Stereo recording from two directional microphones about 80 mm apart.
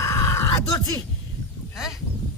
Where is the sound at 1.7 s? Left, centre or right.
Centre.